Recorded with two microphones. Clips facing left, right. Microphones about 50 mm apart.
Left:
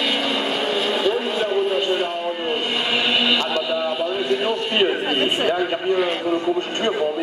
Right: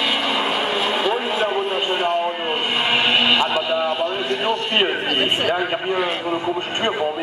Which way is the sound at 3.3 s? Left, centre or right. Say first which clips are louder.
Right 2 dB; centre.